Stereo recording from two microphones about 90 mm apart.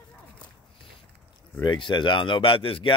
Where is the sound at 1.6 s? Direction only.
60° left (ahead or behind); by 2.9 s 90° left.